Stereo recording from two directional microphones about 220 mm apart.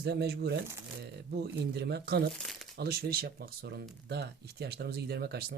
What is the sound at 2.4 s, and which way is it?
Speech, centre (ahead or behind).